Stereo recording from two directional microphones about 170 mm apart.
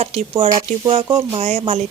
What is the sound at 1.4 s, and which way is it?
Speech, 45° right (ahead or behind).